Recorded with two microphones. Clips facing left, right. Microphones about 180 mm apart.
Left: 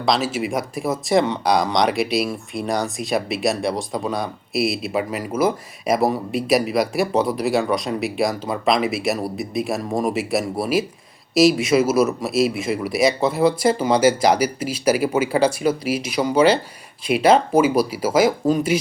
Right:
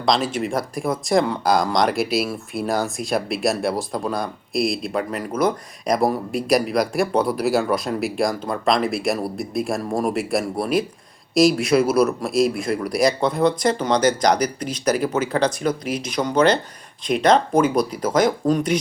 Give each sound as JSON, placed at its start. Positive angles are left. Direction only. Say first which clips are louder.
{"t": 0.0, "sound": "a man's voice", "louder": "even", "side_deg": 5}